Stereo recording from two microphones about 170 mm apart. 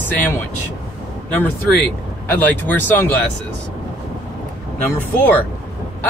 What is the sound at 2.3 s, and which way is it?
Speech, 10° left (ahead or behind).